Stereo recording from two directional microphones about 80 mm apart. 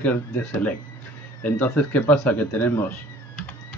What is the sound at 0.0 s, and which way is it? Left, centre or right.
Speech, left.